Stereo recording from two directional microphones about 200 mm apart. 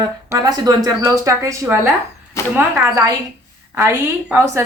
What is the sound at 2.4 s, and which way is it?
Speech, 15° left (ahead or behind).